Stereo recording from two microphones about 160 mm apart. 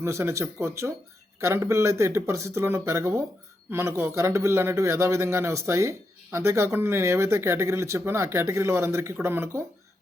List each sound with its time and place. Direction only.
0.0 s speech: 15° right (ahead or behind)